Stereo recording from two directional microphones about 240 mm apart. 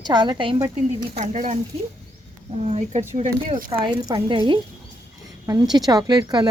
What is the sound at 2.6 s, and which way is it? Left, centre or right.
Speech, right.